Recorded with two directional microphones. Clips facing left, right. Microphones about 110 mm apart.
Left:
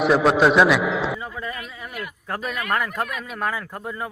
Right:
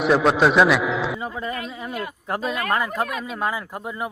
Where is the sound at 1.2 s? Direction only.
25° right (ahead or behind).